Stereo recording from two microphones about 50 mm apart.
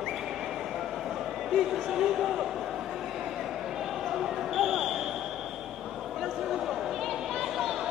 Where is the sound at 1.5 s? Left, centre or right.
Centre.